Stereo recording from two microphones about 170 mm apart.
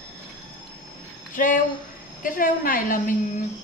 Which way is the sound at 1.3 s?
50° left (ahead or behind).